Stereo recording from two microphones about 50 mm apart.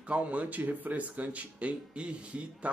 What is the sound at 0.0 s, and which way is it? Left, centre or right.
A man's voice, right.